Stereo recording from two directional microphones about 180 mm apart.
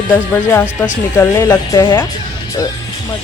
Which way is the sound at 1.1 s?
15° left (ahead or behind).